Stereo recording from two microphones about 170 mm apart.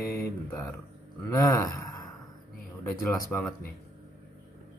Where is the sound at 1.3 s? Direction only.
20° left (ahead or behind).